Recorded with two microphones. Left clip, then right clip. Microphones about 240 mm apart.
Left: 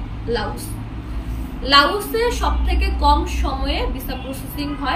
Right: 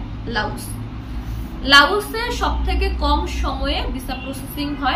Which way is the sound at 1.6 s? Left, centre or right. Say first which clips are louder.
Right 2 dB; centre.